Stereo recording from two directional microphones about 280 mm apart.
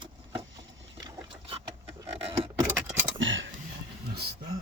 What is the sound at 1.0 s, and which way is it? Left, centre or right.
Boat, centre.